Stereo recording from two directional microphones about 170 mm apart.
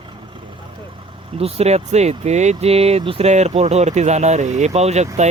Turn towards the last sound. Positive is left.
turn(degrees=-40)  # may be behind; listen again after turning